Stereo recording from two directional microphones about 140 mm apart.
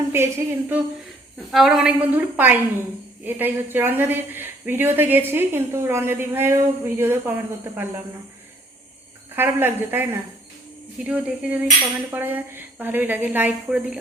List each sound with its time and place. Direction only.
0.1 s a woman's voice: 15° right (ahead or behind)
1.5 s a woman's voice: centre (ahead or behind)
9.3 s a woman's voice: 15° right (ahead or behind)